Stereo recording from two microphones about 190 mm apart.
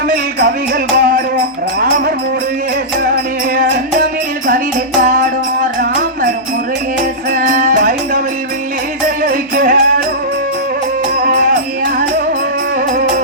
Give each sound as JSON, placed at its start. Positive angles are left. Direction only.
{"t": 0.1, "sound": "music", "side_deg": -50}
{"t": 4.9, "sound": "music", "side_deg": -45}
{"t": 7.3, "sound": "music", "side_deg": -45}
{"t": 9.2, "sound": "music", "side_deg": -45}
{"t": 11.2, "sound": "music", "side_deg": -50}